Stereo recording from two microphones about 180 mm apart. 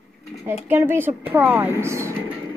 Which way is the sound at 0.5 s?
15° right (ahead or behind).